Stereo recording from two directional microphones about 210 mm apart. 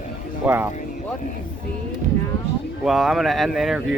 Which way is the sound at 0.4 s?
10° right (ahead or behind).